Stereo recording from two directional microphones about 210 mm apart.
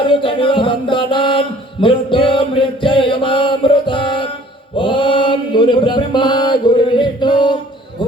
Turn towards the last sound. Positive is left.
turn(degrees=20)  # may be behind; listen again after turning